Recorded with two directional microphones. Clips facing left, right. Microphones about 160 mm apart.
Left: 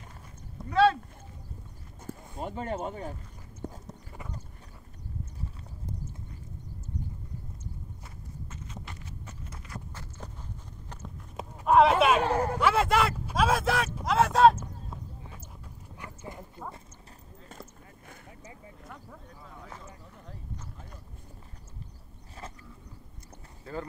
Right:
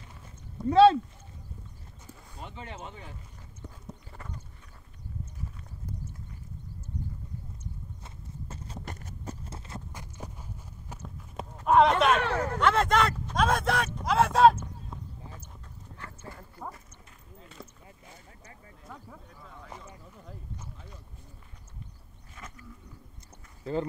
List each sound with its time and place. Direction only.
0.7 s a sound: 30° right (ahead or behind)
2.0 s speech: 45° left (ahead or behind)
3.6 s clip-clop: 45° left (ahead or behind)
8.5 s clip-clop: 35° right (ahead or behind)
9.9 s walk: 15° right (ahead or behind)
11.0 s clip-clop: centre (ahead or behind)
12.5 s a sound: 5° left (ahead or behind)
16.0 s clip-clop: 15° left (ahead or behind)
22.3 s vehicle: 35° left (ahead or behind)
23.6 s speech: 25° right (ahead or behind)